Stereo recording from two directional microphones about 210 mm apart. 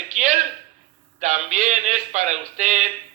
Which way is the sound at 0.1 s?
35° right (ahead or behind).